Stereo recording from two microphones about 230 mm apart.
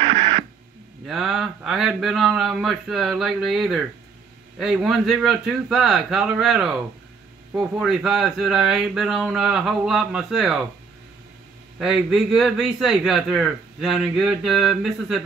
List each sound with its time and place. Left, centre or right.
0.0 s radio: right
1.0 s speech: centre
11.8 s speech: centre